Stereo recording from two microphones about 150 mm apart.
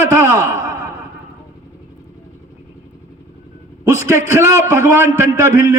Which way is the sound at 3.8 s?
15° right (ahead or behind).